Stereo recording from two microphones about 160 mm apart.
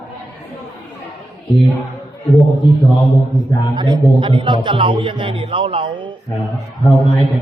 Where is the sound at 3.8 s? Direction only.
30° right (ahead or behind).